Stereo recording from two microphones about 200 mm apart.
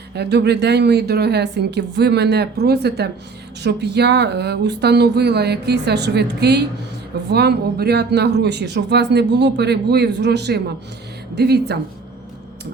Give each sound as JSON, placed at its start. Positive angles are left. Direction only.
{"t": 0.1, "sound": "speech", "side_deg": -55}